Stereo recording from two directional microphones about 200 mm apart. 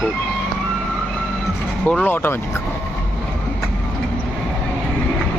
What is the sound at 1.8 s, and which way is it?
Speech, 5° left (ahead or behind).